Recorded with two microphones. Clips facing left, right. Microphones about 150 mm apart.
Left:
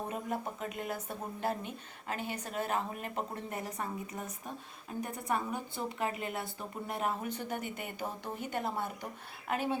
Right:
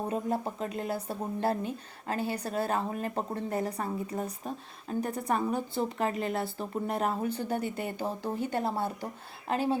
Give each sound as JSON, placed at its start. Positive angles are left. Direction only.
{"t": 0.1, "sound": "speech", "side_deg": -35}